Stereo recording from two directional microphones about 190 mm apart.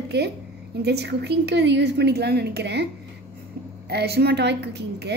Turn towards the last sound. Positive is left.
turn(degrees=-60)  # may be behind; listen again after turning